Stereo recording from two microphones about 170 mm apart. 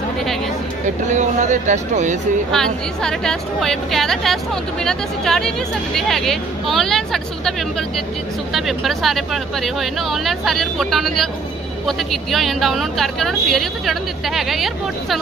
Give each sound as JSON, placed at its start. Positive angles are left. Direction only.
{"t": 1.0, "sound": "speech", "side_deg": -45}
{"t": 2.5, "sound": "a woman's voice", "side_deg": 5}
{"t": 8.5, "sound": "a woman's voice", "side_deg": 0}